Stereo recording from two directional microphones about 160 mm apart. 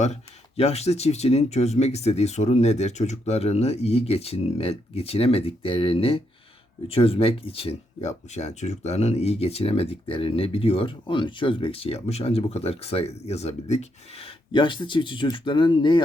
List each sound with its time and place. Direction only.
0.0 s speech: 40° left (ahead or behind)